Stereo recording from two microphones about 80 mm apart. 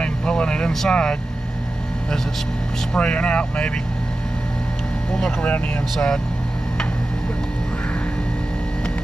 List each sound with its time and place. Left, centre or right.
0.0 s vehicle: centre
2.9 s speech: centre
5.1 s speech: centre